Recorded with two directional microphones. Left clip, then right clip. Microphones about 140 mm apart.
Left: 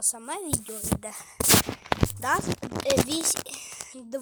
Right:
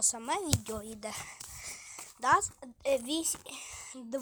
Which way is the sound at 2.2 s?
15° left (ahead or behind).